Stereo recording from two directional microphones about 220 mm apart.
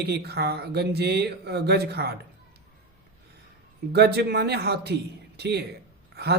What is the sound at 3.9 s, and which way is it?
Speech, 50° right (ahead or behind).